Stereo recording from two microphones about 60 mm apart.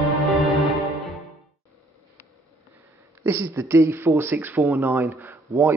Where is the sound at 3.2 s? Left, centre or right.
Right.